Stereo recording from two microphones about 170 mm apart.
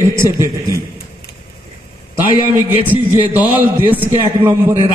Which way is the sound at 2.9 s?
10° right (ahead or behind).